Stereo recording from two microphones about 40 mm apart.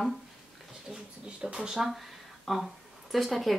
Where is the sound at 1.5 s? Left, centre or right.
Centre.